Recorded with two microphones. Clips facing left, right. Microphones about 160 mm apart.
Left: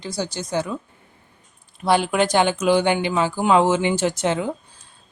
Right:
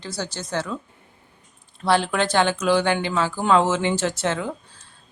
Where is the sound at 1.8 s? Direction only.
15° left (ahead or behind).